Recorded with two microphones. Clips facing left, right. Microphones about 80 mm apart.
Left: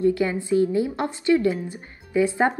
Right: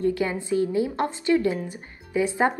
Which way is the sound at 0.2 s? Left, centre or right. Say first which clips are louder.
Left 3 dB; right.